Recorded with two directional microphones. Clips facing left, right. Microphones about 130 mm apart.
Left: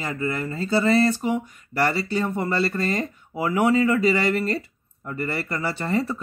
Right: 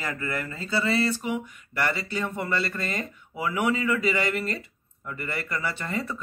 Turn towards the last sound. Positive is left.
turn(degrees=35)  # may be behind; listen again after turning